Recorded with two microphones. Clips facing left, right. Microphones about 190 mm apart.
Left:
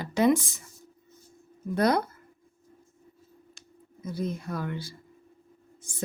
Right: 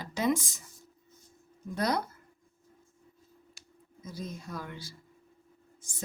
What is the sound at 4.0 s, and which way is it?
Speech, 60° left (ahead or behind).